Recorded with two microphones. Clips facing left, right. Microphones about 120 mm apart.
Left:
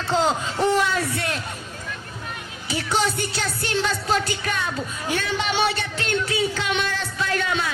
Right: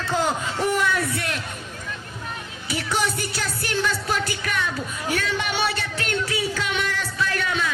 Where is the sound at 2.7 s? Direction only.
25° left (ahead or behind).